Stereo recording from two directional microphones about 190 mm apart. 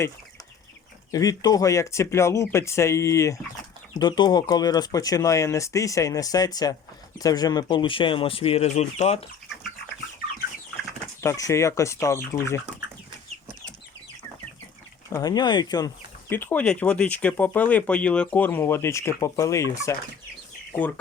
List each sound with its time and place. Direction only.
1.1 s speech: 20° left (ahead or behind); by 9.2 s 35° left (ahead or behind)
11.2 s speech: 15° left (ahead or behind)
15.1 s speech: 20° left (ahead or behind)
16.3 s speech: 10° left (ahead or behind)